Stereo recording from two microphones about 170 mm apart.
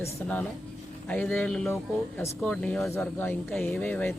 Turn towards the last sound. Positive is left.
turn(degrees=10)  # may be behind; listen again after turning